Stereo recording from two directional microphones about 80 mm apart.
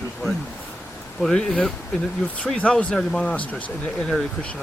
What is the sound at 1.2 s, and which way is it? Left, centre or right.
Speech, centre.